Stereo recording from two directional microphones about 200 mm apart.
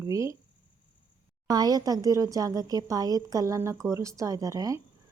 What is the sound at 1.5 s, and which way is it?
Speech, 20° right (ahead or behind).